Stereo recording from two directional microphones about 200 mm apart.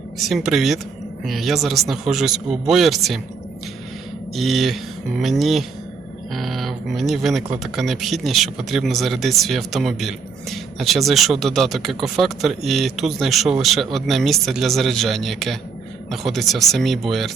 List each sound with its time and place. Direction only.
0.3 s a man's voice: centre (ahead or behind)
4.4 s a man's voice: centre (ahead or behind)